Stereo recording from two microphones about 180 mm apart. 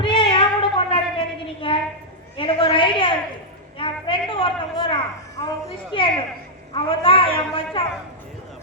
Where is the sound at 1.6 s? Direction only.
30° left (ahead or behind).